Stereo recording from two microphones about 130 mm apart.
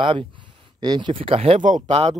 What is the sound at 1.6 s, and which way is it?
Speech, 80° right.